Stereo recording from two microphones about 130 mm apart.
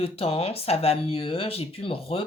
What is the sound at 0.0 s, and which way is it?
Speech, 50° left (ahead or behind).